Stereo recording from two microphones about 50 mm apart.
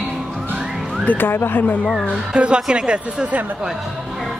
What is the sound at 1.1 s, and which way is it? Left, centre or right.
Speech, left.